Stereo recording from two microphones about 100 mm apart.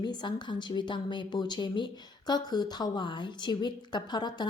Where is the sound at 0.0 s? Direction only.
50° left (ahead or behind).